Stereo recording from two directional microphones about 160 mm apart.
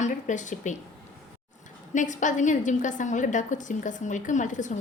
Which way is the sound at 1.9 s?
50° left (ahead or behind).